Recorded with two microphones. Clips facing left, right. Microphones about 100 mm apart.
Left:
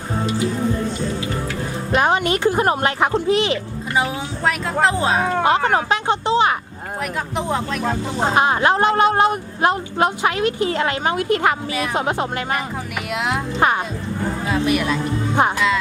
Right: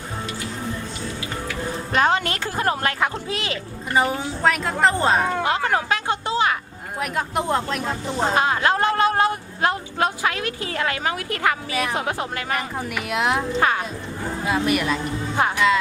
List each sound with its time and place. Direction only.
2.0 s speech: 15° left (ahead or behind)
3.9 s speech: centre (ahead or behind)
5.4 s speech: 25° left (ahead or behind)
7.0 s speech: 5° right (ahead or behind)
8.2 s speech: 20° left (ahead or behind)
13.1 s speech: centre (ahead or behind)
13.6 s speech: 25° left (ahead or behind)
14.4 s speech: centre (ahead or behind)